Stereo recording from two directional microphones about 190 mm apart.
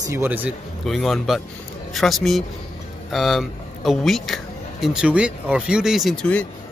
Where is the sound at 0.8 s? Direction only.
Centre (ahead or behind).